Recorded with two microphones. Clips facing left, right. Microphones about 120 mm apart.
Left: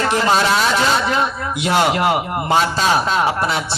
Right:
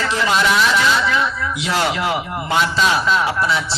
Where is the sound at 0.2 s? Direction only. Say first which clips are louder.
Right 1 dB; 40° left (ahead or behind).